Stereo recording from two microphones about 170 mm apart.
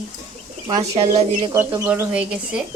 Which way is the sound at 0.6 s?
30° right (ahead or behind).